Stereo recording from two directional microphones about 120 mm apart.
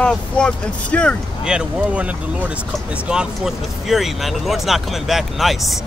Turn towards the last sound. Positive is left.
turn(degrees=0)  # may be behind; listen again after turning